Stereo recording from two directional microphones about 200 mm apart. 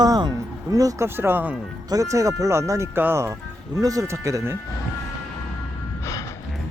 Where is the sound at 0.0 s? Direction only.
20° right (ahead or behind).